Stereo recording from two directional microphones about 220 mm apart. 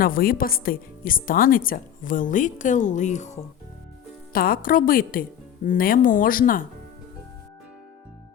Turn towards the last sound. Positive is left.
turn(degrees=40)  # may be behind; listen again after turning